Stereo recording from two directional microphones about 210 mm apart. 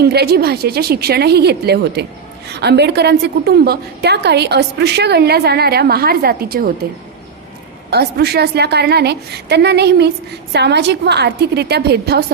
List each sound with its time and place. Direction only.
0.0 s a woman's voice: 50° right (ahead or behind)
7.9 s a woman's voice: 50° right (ahead or behind)